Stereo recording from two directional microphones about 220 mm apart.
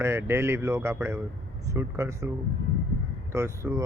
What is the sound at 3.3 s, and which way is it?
Speech, 10° right (ahead or behind).